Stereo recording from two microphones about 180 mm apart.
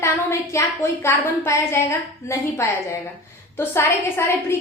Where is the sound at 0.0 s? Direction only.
15° left (ahead or behind).